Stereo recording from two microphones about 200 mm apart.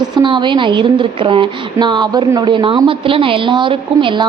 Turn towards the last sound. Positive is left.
turn(degrees=-25)  # may be behind; listen again after turning